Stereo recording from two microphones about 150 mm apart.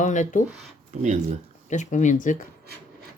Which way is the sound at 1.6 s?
55° left (ahead or behind).